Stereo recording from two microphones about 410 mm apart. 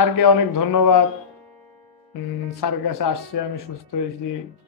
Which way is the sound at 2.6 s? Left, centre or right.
Left.